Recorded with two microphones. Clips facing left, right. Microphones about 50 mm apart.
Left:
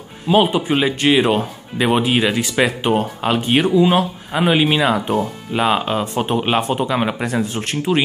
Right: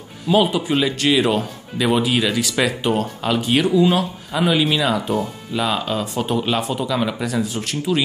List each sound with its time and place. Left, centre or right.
0.3 s speech: left